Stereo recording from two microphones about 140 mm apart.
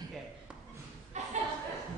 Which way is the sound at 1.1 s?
55° right (ahead or behind).